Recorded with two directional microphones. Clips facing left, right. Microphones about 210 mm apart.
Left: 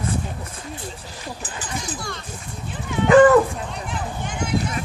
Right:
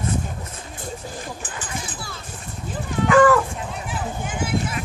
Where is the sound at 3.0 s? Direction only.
20° left (ahead or behind).